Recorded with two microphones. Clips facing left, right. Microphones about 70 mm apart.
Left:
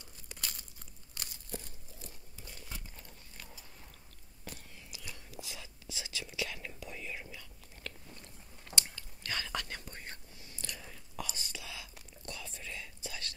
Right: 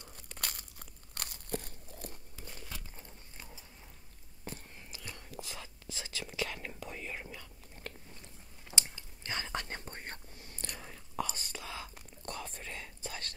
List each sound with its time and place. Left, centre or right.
0.4 s crunch: right
3.0 s a sound: right
4.5 s whispering: right
8.2 s chewing: centre
9.2 s whispering: right